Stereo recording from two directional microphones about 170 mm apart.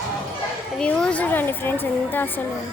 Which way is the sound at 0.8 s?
5° left (ahead or behind).